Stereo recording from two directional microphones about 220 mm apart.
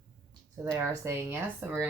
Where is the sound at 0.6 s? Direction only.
10° right (ahead or behind).